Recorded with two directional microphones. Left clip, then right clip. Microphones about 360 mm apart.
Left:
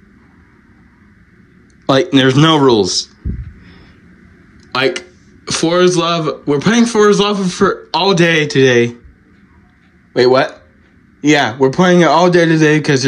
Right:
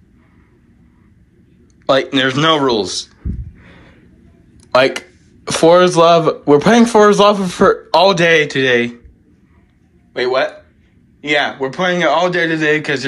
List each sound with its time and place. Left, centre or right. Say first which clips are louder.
1.9 s speech: left 2 dB; centre
3.6 s a sound: even; centre
4.7 s speech: right 3 dB; centre
10.1 s speech: left 5 dB; centre